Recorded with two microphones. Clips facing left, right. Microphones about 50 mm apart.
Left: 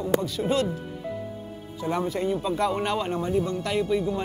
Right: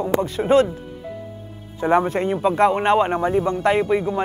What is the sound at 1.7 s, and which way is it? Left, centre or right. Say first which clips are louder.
Speech: right 9 dB; right.